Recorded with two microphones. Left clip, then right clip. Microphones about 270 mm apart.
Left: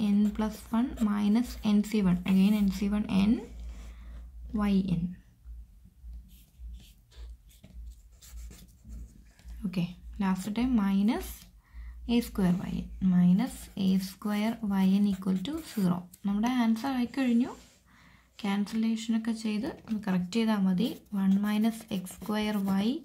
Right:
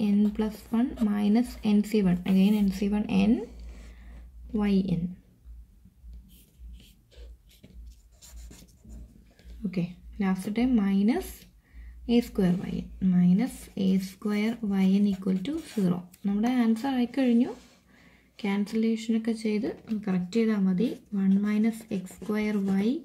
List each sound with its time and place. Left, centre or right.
0.0 s speech: centre
4.6 s speech: centre
9.7 s speech: centre